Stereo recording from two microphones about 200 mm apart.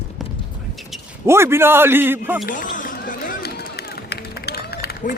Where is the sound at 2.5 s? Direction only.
40° left (ahead or behind).